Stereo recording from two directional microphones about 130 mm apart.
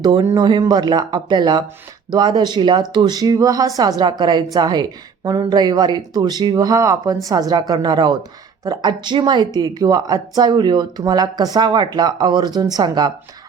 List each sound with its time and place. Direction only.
0.3 s a woman's voice: 35° right (ahead or behind)